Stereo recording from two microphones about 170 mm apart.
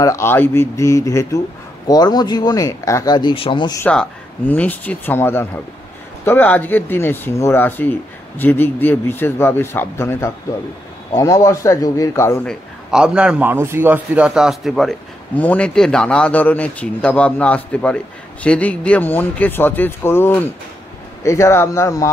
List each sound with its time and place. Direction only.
0.0 s a man's voice: 15° left (ahead or behind)
3.8 s a man's voice: 10° left (ahead or behind)
12.4 s a man's voice: 5° right (ahead or behind); by 22.1 s 20° left (ahead or behind)